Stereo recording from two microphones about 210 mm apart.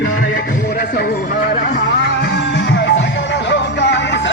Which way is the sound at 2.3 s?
55° left (ahead or behind).